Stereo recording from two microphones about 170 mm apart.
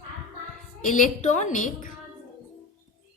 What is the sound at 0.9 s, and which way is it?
A woman's voice, 50° left (ahead or behind).